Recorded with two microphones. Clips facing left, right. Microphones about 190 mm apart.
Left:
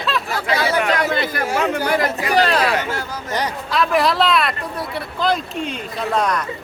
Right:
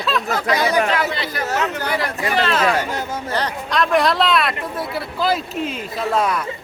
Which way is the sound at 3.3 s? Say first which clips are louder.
Left 1 dB; 5° left (ahead or behind).